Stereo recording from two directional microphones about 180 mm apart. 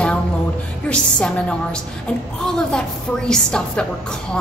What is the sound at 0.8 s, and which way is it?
A woman's voice, 5° left (ahead or behind).